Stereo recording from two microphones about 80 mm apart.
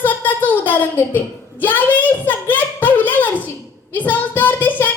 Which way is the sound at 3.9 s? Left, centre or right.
Left.